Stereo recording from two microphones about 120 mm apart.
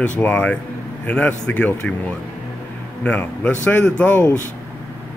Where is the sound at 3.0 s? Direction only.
15° left (ahead or behind).